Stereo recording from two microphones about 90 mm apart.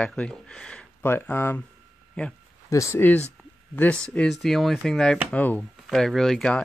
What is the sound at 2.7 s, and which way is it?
Speech, 35° left (ahead or behind).